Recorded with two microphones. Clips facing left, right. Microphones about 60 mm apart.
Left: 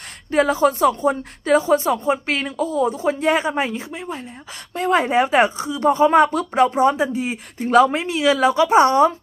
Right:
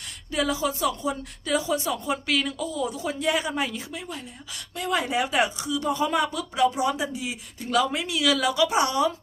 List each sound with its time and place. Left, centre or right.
0.3 s speech: left